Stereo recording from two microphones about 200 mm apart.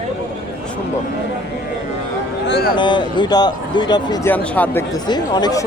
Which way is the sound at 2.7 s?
25° left (ahead or behind).